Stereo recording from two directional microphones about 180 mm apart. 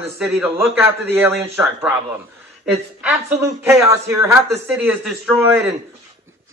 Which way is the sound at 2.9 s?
10° right (ahead or behind).